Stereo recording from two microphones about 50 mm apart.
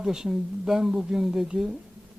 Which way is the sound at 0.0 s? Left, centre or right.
Centre.